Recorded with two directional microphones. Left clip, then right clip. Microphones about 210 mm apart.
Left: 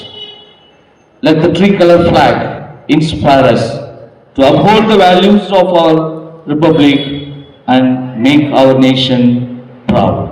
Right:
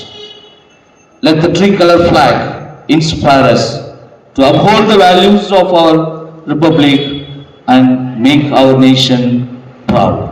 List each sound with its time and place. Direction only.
1.2 s a man's voice: 15° right (ahead or behind)
9.8 s music: 15° right (ahead or behind)